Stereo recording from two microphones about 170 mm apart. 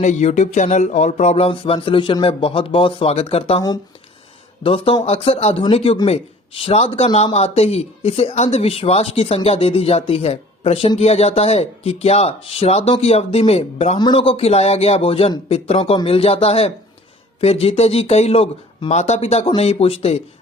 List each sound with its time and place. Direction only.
0.0 s speech: 40° left (ahead or behind)
4.6 s speech: 30° left (ahead or behind)